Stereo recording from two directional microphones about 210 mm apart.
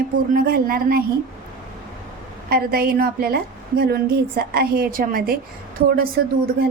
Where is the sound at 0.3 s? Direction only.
45° right (ahead or behind).